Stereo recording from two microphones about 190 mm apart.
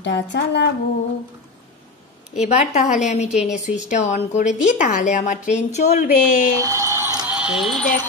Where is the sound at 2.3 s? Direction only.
35° left (ahead or behind).